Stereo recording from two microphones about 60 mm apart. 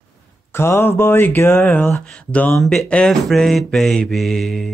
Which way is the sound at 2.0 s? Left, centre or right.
Centre.